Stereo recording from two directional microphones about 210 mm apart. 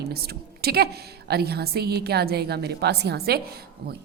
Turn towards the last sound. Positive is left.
turn(degrees=-50)  # may be behind; listen again after turning